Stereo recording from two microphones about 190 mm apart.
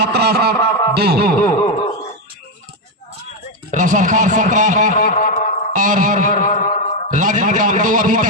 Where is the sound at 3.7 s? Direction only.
40° right (ahead or behind).